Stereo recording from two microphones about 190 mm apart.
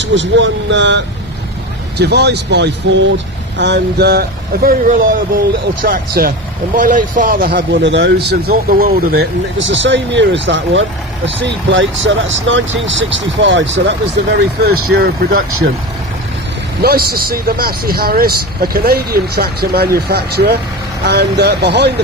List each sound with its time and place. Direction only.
0.0 s speech: 70° right (ahead or behind)
14.6 s speech: 55° right (ahead or behind)
16.8 s speech: 55° right (ahead or behind)